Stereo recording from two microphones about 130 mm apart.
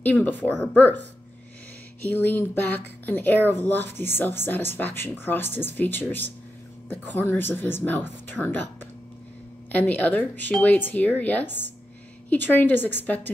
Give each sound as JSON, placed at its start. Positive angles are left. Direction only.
{"t": 0.0, "sound": "speech", "side_deg": 15}
{"t": 2.0, "sound": "speech", "side_deg": 10}
{"t": 9.7, "sound": "speech", "side_deg": 10}